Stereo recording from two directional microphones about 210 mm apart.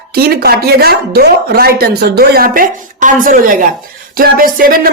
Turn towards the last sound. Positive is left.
turn(degrees=-45)  # may be behind; listen again after turning